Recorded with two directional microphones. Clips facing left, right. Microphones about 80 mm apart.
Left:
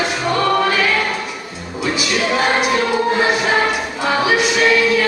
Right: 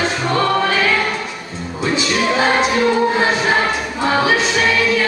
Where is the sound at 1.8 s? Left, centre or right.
Right.